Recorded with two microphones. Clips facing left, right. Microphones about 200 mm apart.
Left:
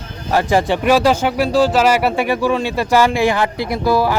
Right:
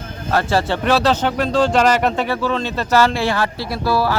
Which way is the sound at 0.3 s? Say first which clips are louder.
Left 3 dB; 15° left (ahead or behind).